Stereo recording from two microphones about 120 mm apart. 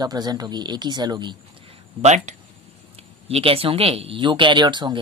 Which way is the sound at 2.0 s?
75° right (ahead or behind).